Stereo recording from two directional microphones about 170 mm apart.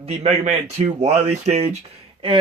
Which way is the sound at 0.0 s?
40° right (ahead or behind).